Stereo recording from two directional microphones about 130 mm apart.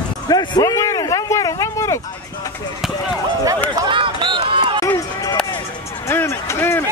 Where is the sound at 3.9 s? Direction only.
40° right (ahead or behind).